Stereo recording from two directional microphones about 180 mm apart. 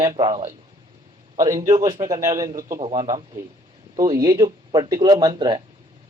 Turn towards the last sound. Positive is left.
turn(degrees=-25)  # may be behind; listen again after turning